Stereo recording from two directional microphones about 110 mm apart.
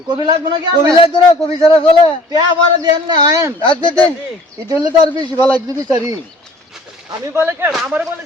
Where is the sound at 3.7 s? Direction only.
50° left (ahead or behind).